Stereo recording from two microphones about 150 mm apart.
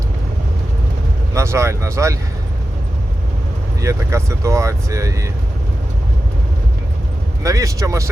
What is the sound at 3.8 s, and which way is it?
Speech, 20° right (ahead or behind).